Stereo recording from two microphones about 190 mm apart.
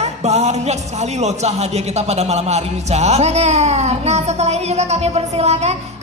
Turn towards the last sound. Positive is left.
turn(degrees=-35)  # may be behind; listen again after turning